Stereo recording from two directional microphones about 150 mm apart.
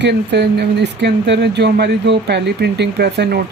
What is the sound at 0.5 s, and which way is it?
Speech, 90° right.